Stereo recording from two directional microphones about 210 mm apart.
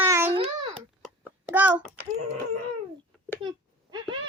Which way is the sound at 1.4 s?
10° right (ahead or behind).